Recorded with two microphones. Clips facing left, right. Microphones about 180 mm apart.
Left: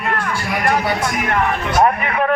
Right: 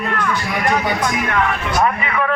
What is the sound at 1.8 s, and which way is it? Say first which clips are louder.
Speech: left 3 dB; 45° left (ahead or behind).